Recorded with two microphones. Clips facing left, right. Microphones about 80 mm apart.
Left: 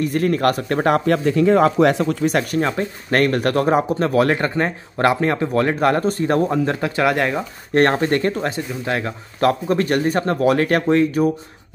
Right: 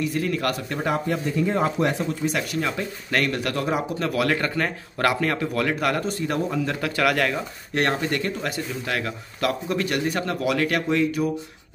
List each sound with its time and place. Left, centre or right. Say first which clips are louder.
0.0 s speech: left 7 dB; left
2.3 s speech: left 6 dB; left
7.7 s speech: left 8 dB; left
8.5 s speech: left 5 dB; left